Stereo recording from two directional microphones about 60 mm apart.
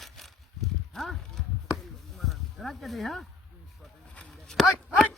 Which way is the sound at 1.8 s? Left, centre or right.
Centre.